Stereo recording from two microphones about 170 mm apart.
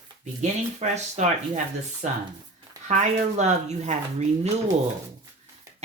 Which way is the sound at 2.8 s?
45° right (ahead or behind).